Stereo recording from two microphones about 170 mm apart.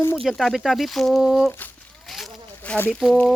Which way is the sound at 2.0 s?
Centre (ahead or behind).